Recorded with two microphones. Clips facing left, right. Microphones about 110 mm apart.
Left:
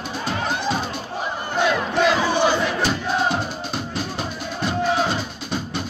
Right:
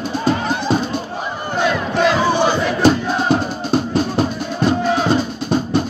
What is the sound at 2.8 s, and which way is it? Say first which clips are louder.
Music: right 7 dB; 40° right (ahead or behind).